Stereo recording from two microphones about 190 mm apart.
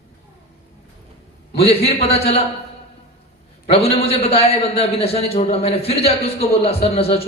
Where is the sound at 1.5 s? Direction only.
30° left (ahead or behind).